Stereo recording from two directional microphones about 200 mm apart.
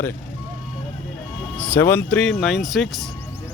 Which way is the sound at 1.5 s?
10° left (ahead or behind).